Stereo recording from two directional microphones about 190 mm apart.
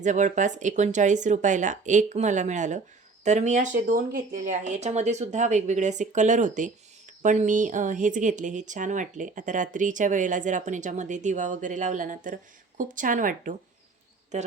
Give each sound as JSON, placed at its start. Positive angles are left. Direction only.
{"t": 0.0, "sound": "speech", "side_deg": -40}